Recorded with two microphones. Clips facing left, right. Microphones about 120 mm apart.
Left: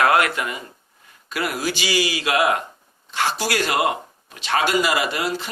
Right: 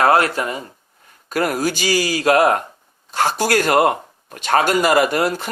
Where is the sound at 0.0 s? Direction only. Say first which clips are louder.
Right 3 dB; 35° right (ahead or behind).